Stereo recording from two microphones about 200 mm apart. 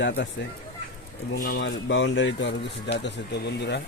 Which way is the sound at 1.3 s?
45° left (ahead or behind).